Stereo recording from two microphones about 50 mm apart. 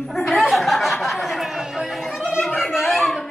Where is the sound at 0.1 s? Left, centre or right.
Centre.